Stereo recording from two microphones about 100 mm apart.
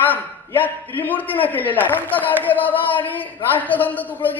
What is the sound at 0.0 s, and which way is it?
A man's voice, 20° left (ahead or behind).